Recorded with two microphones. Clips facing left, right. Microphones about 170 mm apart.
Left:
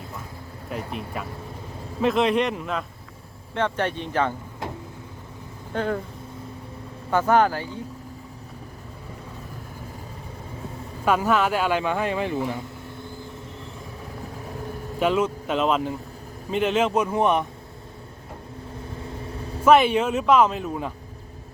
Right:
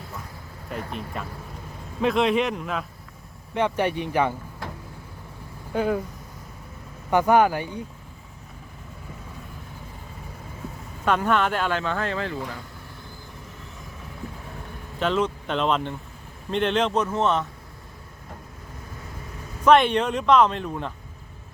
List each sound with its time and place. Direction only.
0.7 s speech: centre (ahead or behind)
3.5 s speech: 15° right (ahead or behind)
4.6 s vehicle: 20° left (ahead or behind)
5.7 s speech: 10° right (ahead or behind)
7.1 s speech: 15° right (ahead or behind)
11.0 s speech: 5° left (ahead or behind)
14.9 s speech: 10° left (ahead or behind)
19.6 s speech: 5° left (ahead or behind)